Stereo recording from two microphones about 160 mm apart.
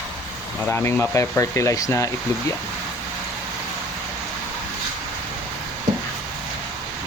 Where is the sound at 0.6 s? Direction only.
15° left (ahead or behind).